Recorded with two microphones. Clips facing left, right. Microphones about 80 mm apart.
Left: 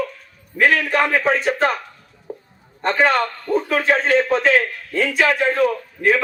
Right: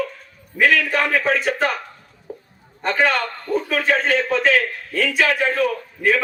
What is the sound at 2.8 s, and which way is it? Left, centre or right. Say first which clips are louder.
A man's voice: left 2 dB; left.